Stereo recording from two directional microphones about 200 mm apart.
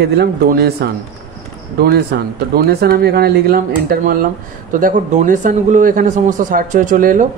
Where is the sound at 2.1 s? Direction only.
55° right (ahead or behind).